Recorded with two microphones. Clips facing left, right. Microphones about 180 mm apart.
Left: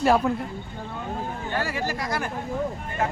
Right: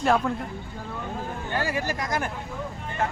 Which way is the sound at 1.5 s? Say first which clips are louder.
Right 1 dB; 15° right (ahead or behind).